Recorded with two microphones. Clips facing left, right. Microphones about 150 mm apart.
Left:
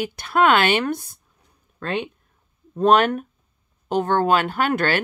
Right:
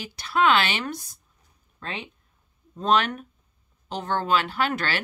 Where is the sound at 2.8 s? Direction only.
55° left (ahead or behind).